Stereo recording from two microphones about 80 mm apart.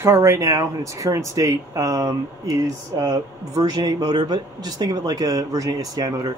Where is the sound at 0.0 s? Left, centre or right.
Right.